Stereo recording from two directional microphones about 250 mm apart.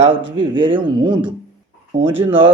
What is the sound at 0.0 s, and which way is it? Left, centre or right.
Speech, right.